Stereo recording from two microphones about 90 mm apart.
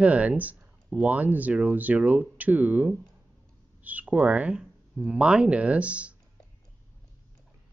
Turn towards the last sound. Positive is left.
turn(degrees=-15)  # may be behind; listen again after turning